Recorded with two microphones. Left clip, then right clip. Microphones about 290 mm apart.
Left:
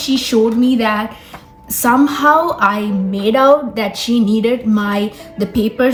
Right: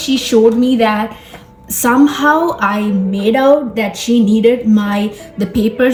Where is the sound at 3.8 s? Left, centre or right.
Centre.